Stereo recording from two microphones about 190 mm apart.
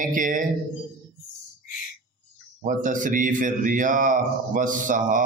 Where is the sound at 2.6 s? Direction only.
40° right (ahead or behind).